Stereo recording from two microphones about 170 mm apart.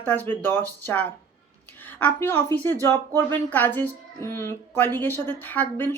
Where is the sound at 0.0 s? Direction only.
10° left (ahead or behind).